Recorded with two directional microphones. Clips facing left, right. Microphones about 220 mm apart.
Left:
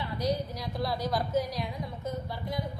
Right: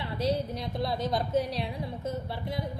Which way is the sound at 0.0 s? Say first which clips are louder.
Right 1 dB; 25° right (ahead or behind).